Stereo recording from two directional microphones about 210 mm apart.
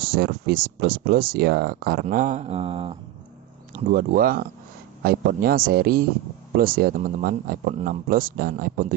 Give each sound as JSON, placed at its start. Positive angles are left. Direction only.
{"t": 0.0, "sound": "speech", "side_deg": -50}
{"t": 3.7, "sound": "speech", "side_deg": -40}